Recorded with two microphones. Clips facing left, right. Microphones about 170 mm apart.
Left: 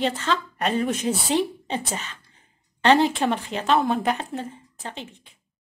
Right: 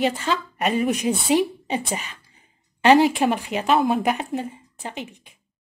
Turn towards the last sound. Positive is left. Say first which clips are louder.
# right 3 dB
turn(degrees=-15)  # may be behind; listen again after turning